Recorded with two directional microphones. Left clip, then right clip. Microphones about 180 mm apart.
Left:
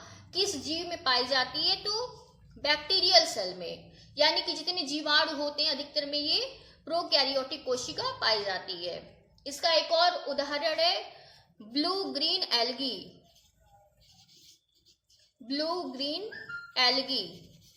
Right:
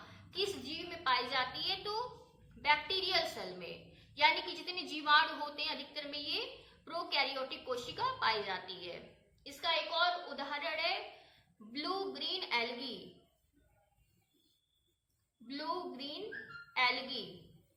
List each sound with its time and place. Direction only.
1.0 s a woman's voice: 40° left (ahead or behind)
15.4 s a woman's voice: 45° left (ahead or behind)